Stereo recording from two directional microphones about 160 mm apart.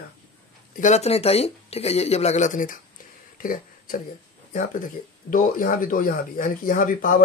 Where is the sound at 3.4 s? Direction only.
60° left (ahead or behind).